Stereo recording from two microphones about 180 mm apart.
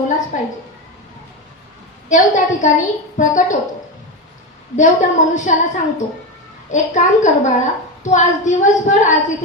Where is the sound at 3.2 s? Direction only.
45° left (ahead or behind).